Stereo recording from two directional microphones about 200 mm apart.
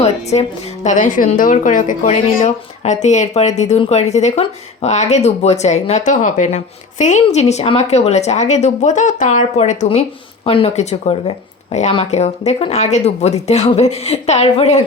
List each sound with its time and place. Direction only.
0.0 s a woman's voice: 35° left (ahead or behind)